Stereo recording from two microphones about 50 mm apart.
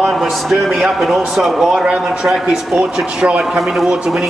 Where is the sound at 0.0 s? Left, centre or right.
Centre.